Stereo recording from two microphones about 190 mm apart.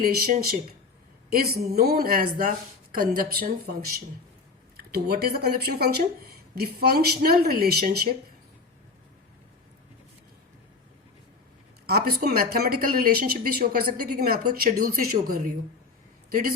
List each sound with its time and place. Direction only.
0.0 s speech: 55° right (ahead or behind)
11.9 s speech: 55° right (ahead or behind)